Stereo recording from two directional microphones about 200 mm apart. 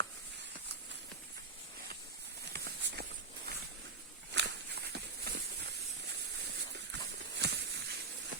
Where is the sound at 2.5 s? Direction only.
55° right (ahead or behind).